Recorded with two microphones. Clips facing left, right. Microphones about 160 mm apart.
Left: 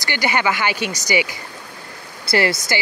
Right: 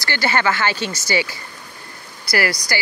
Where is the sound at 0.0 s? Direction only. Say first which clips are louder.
Even; 15° left (ahead or behind).